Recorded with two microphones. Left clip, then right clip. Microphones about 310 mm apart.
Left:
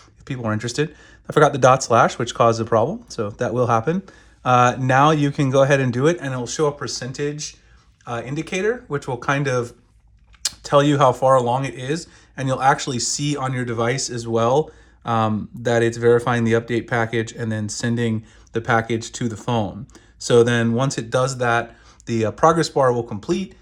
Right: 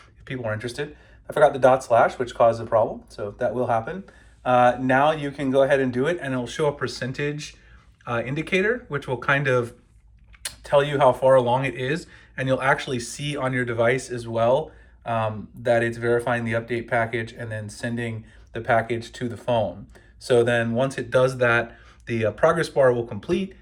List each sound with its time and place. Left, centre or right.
0.3 s speech: left
3.6 s speech: left